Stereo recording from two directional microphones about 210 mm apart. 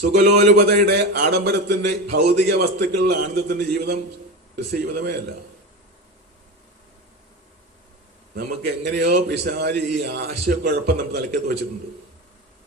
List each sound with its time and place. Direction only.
0.0 s a man's voice: 50° right (ahead or behind)
8.6 s a man's voice: 50° right (ahead or behind)